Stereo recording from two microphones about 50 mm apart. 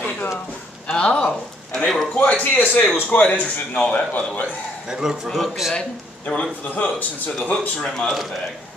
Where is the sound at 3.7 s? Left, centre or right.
Left.